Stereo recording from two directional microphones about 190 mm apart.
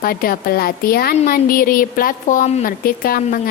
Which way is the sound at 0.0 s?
50° left (ahead or behind).